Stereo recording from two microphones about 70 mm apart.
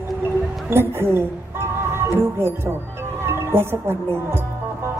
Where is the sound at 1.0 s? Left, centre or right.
Right.